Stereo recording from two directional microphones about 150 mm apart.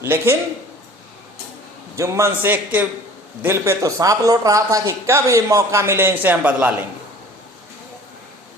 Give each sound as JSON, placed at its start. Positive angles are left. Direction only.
{"t": 0.0, "sound": "a man's voice", "side_deg": -15}
{"t": 2.0, "sound": "a man's voice", "side_deg": -20}